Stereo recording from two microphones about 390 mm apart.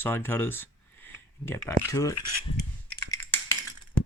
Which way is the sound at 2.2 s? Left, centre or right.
Left.